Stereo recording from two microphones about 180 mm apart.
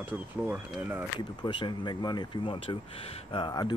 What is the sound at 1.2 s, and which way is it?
Speech, 25° left (ahead or behind).